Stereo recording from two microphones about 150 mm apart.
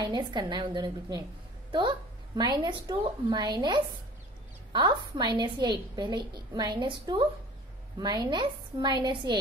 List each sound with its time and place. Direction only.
0.0 s a woman's voice: 30° right (ahead or behind)